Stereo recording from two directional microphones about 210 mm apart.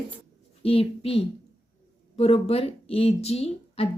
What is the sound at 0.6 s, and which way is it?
Speech, 25° left (ahead or behind).